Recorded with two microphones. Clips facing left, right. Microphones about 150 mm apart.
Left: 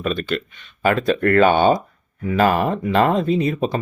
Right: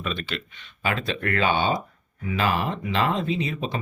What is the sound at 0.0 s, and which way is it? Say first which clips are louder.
Speech: left 8 dB; 45° left (ahead or behind).